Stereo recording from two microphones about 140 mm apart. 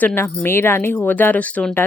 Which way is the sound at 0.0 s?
15° left (ahead or behind).